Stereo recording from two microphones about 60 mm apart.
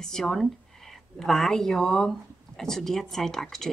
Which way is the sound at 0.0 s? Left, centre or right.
Centre.